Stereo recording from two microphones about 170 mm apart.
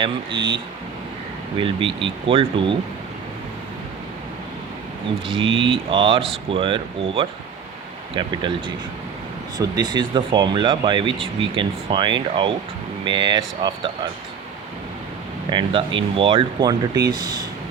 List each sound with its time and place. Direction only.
0.0 s speech: 30° right (ahead or behind)
5.4 s speech: 30° right (ahead or behind)
15.4 s speech: 30° right (ahead or behind)